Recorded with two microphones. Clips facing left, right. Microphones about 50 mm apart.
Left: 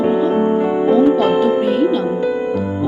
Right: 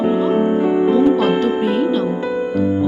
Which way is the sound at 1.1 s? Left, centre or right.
Centre.